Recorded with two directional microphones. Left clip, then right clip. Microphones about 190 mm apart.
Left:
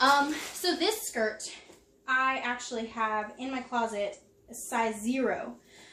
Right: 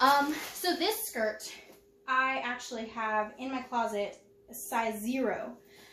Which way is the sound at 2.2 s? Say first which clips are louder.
Left 2 dB; 10° right (ahead or behind).